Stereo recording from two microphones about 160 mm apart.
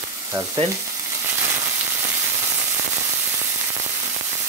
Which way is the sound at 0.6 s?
35° right (ahead or behind).